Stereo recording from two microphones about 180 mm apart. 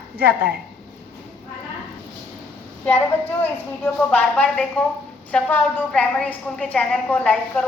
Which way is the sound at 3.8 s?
10° left (ahead or behind).